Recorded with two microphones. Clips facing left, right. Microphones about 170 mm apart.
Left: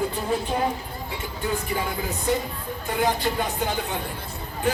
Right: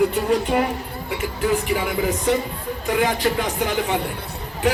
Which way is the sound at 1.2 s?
90° right.